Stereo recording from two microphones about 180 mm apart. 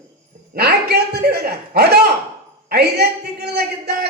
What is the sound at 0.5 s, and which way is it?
A man's voice, 65° right (ahead or behind).